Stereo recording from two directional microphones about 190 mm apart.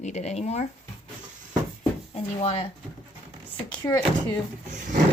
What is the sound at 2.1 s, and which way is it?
Speech, 35° left (ahead or behind).